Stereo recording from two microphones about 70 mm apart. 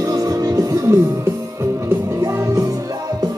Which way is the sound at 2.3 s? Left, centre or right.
Right.